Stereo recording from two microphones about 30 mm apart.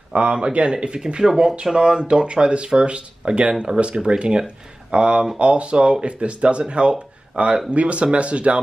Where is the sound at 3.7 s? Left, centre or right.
Right.